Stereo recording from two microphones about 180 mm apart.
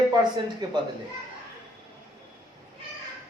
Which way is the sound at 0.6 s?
25° right (ahead or behind).